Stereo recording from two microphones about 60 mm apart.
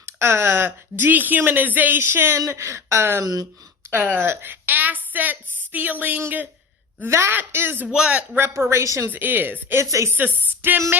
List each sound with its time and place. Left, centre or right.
0.0 s speech: right
3.8 s a woman's voice: right
7.9 s speech: centre
8.4 s speech: right
9.0 s speech: right